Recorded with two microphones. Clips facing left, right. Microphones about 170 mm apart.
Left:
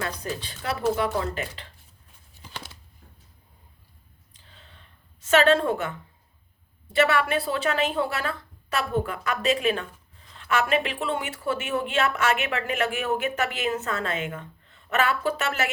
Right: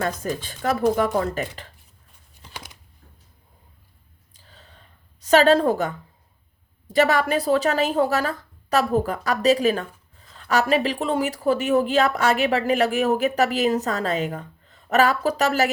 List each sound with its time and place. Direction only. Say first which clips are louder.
0.0 s speech: right 5 dB; 45° right (ahead or behind)
4.4 s a sound: right 3 dB; 40° right (ahead or behind)
5.2 s speech: right 4 dB; 35° right (ahead or behind)